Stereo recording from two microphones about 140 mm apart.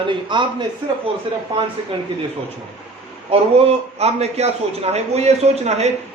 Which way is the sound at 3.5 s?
50° right (ahead or behind).